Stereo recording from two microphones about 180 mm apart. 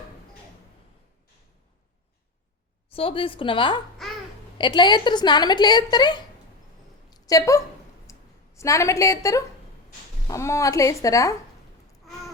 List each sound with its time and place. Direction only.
2.9 s a woman's voice: 30° left (ahead or behind)
4.0 s babbling: centre (ahead or behind)
4.5 s a woman's voice: 25° left (ahead or behind)
7.1 s a sound: 20° left (ahead or behind)
8.1 s clicking: 15° left (ahead or behind)
8.5 s a woman's voice: 15° left (ahead or behind)